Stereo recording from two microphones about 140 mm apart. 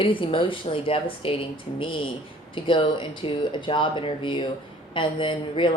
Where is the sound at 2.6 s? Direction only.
35° left (ahead or behind).